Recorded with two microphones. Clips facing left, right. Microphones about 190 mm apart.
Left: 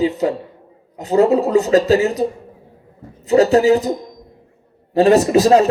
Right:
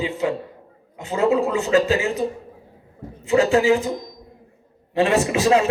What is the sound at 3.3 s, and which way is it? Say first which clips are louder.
A man's voice: left 5 dB; 40° left (ahead or behind).